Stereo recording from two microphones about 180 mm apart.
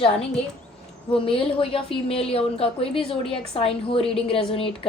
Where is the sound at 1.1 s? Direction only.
30° left (ahead or behind).